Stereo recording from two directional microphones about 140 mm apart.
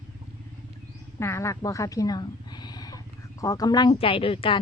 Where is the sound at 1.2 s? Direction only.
20° left (ahead or behind).